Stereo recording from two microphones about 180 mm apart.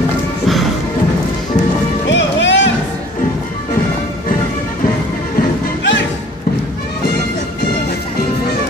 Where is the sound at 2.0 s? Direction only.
90° left.